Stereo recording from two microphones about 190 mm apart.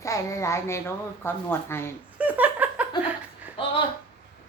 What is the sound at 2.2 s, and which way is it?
Laughter, 10° right (ahead or behind).